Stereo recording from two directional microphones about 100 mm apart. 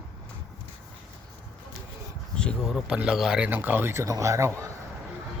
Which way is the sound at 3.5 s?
20° right (ahead or behind).